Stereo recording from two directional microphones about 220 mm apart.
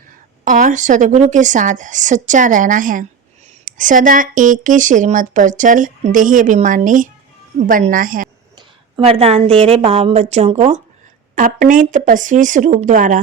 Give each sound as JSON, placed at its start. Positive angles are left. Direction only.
{"t": 0.4, "sound": "a woman's voice", "side_deg": -35}
{"t": 8.5, "sound": "a woman's voice", "side_deg": -25}